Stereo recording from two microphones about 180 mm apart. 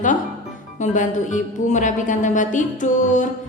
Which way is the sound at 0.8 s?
45° left (ahead or behind).